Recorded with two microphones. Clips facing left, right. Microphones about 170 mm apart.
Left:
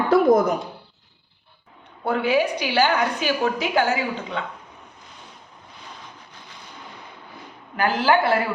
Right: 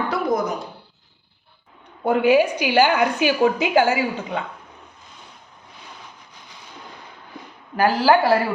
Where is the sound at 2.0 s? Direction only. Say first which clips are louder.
Right 4 dB; 50° right (ahead or behind).